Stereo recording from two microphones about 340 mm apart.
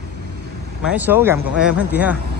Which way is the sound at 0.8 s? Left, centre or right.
Centre.